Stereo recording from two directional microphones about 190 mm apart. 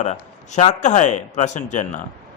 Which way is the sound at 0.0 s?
35° left (ahead or behind).